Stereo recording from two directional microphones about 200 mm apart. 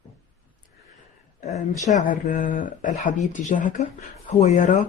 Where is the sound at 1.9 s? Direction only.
40° left (ahead or behind).